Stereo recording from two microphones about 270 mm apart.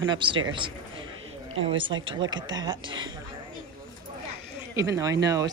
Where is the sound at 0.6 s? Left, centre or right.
Centre.